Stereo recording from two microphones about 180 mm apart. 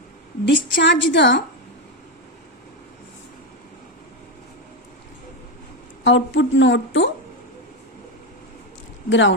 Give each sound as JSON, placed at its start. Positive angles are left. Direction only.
{"t": 0.4, "sound": "a woman's voice", "side_deg": 85}
{"t": 6.1, "sound": "speech", "side_deg": 90}
{"t": 9.0, "sound": "speech", "side_deg": 90}